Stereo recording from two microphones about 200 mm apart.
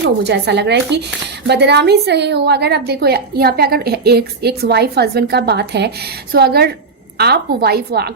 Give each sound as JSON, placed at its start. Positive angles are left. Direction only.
{"t": 0.3, "sound": "a woman's voice", "side_deg": -55}